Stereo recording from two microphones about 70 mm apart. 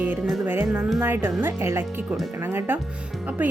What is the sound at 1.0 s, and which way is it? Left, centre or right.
Speech, right.